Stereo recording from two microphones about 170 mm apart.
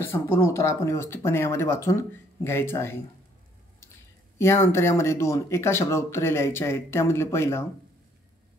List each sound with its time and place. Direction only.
0.0 s speech: 15° left (ahead or behind)
4.4 s speech: 15° left (ahead or behind)